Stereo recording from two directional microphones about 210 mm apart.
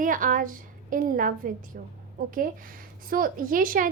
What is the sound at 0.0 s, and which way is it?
A woman's voice, 40° right (ahead or behind).